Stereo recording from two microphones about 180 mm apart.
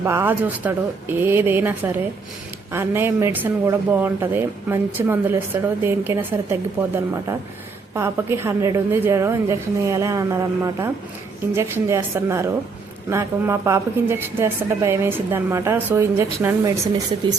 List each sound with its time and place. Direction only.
0.0 s a woman's voice: 10° right (ahead or behind)